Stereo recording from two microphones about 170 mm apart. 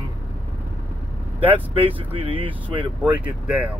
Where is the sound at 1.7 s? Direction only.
30° right (ahead or behind).